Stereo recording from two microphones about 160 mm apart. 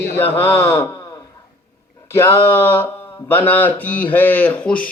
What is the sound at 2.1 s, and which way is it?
Speech, 15° left (ahead or behind).